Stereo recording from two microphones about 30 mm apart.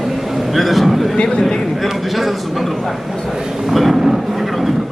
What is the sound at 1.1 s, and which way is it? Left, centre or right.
Speech, left.